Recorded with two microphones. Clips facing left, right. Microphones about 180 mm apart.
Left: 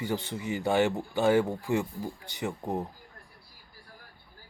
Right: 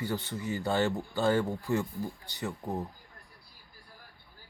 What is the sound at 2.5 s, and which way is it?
Speech, 25° left (ahead or behind).